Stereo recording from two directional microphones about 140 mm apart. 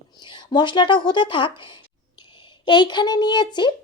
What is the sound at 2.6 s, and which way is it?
Speech, 30° left (ahead or behind).